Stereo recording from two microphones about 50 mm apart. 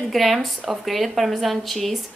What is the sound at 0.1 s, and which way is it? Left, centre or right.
A woman's voice, centre.